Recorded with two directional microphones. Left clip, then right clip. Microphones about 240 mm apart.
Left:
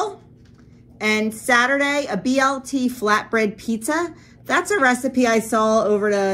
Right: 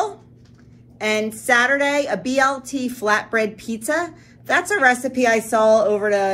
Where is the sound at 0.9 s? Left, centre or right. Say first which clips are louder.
Even; left.